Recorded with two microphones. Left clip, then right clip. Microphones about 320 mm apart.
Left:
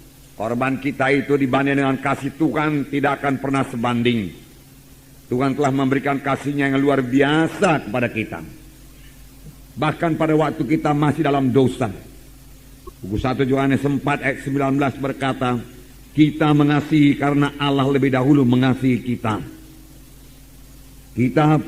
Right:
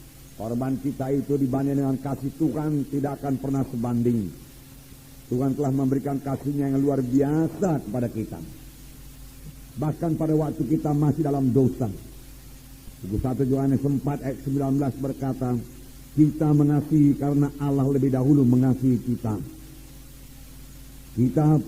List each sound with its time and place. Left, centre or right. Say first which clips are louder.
0.3 s a man's voice: left 8 dB; left
5.4 s a man's voice: left 7 dB; left
9.8 s a man's voice: left 7 dB; left
13.2 s a man's voice: left 6 dB; left
21.3 s a man's voice: left 7 dB; left